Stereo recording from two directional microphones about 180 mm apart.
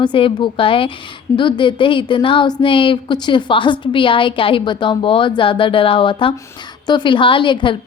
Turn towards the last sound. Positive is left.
turn(degrees=25)  # may be behind; listen again after turning